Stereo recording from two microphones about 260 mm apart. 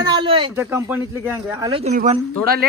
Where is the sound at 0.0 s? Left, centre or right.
Centre.